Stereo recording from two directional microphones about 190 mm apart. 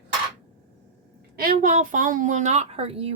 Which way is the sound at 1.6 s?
45° right (ahead or behind).